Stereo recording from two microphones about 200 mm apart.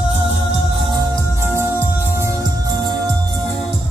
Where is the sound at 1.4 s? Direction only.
10° right (ahead or behind).